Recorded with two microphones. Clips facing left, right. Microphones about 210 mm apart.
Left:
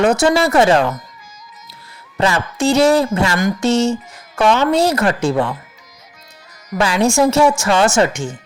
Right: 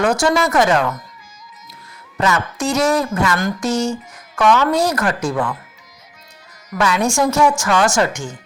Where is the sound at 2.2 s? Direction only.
30° left (ahead or behind).